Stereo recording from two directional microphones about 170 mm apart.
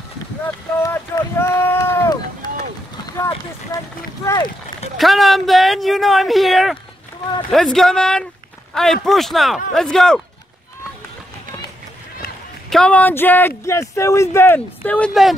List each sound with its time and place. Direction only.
0.8 s run: 15° left (ahead or behind)
2.4 s a sound: 25° left (ahead or behind)
4.2 s speech: 15° left (ahead or behind)
4.9 s speech: centre (ahead or behind)
12.6 s speech: 5° left (ahead or behind)